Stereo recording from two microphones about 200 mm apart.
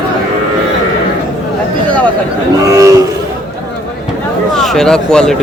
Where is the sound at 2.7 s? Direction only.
15° right (ahead or behind).